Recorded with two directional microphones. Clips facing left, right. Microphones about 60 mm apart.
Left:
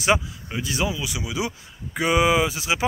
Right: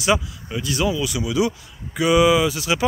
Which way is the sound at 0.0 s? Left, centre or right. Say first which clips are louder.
Right 1 dB; left.